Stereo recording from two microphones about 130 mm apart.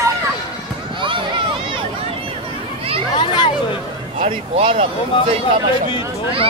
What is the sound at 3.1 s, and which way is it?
Speech, 40° left (ahead or behind).